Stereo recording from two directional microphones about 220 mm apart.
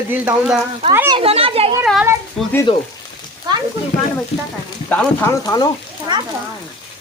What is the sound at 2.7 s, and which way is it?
Speech, 25° left (ahead or behind).